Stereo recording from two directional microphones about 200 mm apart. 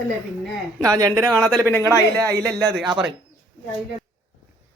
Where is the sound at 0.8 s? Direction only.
20° right (ahead or behind).